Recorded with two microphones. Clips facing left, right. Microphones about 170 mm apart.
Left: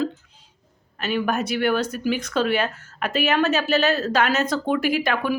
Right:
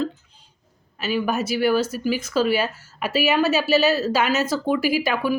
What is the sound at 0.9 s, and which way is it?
Speech, 5° right (ahead or behind).